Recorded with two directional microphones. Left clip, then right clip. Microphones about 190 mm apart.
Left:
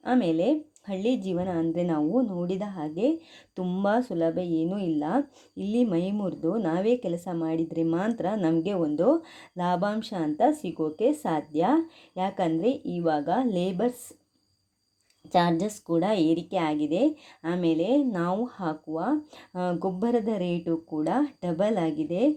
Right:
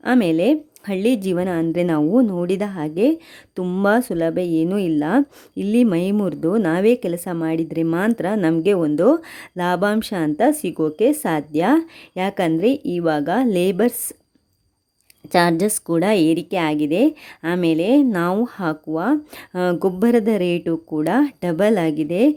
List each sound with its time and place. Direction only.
0.0 s a woman's voice: 35° right (ahead or behind)
15.3 s a woman's voice: 30° right (ahead or behind)